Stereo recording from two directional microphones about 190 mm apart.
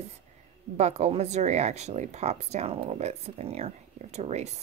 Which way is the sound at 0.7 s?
35° right (ahead or behind).